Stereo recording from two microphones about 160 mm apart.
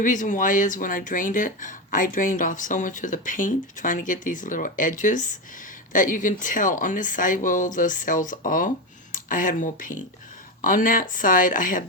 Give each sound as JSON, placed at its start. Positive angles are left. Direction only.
{"t": 0.0, "sound": "speech", "side_deg": 55}